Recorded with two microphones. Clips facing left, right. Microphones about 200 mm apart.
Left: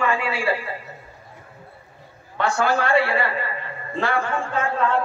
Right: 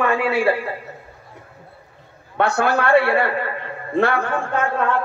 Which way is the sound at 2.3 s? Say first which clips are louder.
Right 2 dB; 60° right (ahead or behind).